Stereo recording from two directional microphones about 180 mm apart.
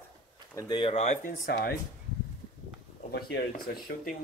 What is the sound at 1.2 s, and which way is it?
Speech, 55° left (ahead or behind).